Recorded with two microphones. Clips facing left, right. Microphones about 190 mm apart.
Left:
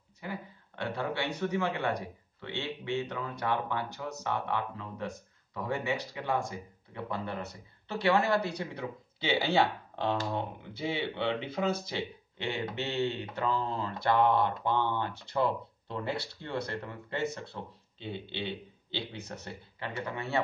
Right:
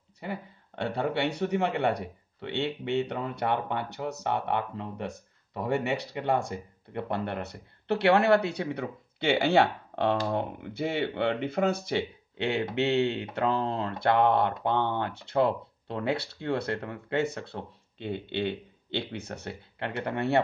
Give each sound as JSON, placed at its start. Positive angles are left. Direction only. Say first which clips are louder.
{"t": 0.8, "sound": "speech", "louder": "right 5 dB", "side_deg": -60}